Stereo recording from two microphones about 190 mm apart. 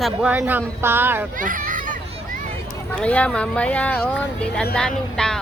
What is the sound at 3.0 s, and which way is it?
Speech, 5° left (ahead or behind).